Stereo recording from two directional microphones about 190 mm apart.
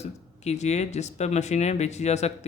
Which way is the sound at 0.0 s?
35° left (ahead or behind).